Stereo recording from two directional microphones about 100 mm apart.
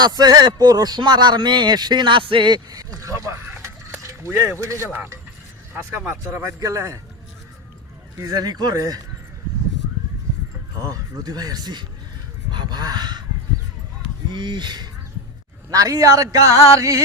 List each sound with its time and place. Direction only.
0.0 s speech: 40° right (ahead or behind); by 5.2 s 20° right (ahead or behind)
6.2 s speech: 30° right (ahead or behind)
8.2 s speech: 40° right (ahead or behind)
10.8 s speech: 35° right (ahead or behind)
14.3 s speech: 50° right (ahead or behind)
15.7 s speech: 35° right (ahead or behind)